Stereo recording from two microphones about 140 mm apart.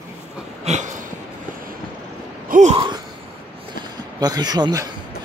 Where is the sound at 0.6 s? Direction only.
60° right (ahead or behind).